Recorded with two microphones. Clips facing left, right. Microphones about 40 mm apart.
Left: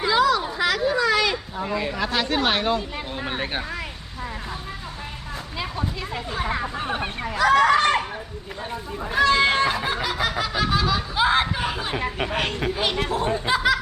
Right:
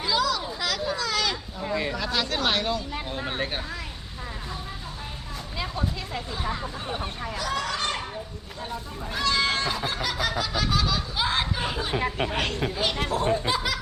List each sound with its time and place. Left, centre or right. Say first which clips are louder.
0.0 s a sound: left 6 dB; left
1.9 s speech: left 4 dB; left
2.9 s speech: left 2 dB; centre
6.5 s speech: left 6 dB; left
6.8 s speech: left 5 dB; left
8.7 s speech: left 8 dB; left
9.8 s speech: left 3 dB; centre